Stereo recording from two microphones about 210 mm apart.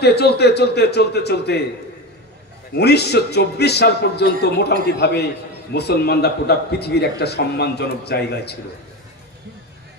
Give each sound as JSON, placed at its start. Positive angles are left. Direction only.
{"t": 0.0, "sound": "speech", "side_deg": 50}
{"t": 2.7, "sound": "speech", "side_deg": 50}